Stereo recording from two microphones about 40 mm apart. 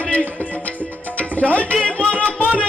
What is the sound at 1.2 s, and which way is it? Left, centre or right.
Tabla, left.